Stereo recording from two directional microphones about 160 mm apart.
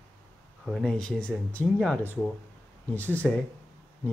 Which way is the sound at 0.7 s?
Centre (ahead or behind).